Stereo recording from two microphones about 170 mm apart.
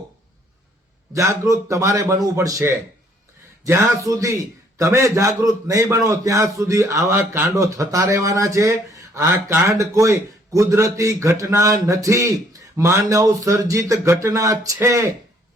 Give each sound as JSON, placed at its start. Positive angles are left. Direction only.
{"t": 1.1, "sound": "a man's voice", "side_deg": -20}